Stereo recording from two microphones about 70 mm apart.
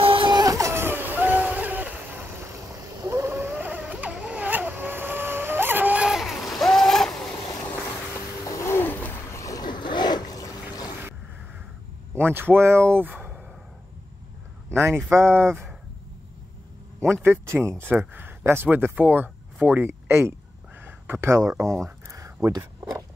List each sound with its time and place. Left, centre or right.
0.5 s vehicle: right
2.7 s a sound: right
3.3 s a sound: right
4.5 s vehicle: right
6.0 s vehicle: centre
7.6 s vehicle: left
8.5 s music: left
9.3 s boat: left
9.6 s a sound: left
12.1 s speech: right
14.7 s speech: right
17.0 s speech: right
20.8 s a sound: right
21.3 s speech: right